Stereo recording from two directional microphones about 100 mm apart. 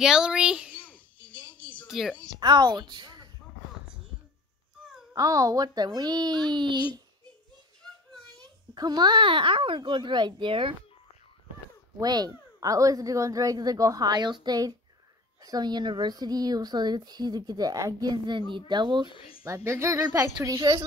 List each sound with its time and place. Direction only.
0.0 s a child's voice: 5° right (ahead or behind)
0.7 s babbling: 15° left (ahead or behind)
1.9 s a woman's voice: centre (ahead or behind)
2.4 s a woman's voice: 45° right (ahead or behind)
5.1 s speech: 35° right (ahead or behind)
7.8 s a sound: centre (ahead or behind)
8.7 s a child's voice: 45° right (ahead or behind); by 10.8 s 60° right (ahead or behind)
12.0 s speech: 40° right (ahead or behind)
19.0 s speech: 65° left (ahead or behind)
19.4 s speech: 30° right (ahead or behind)
20.3 s speech: 45° right (ahead or behind)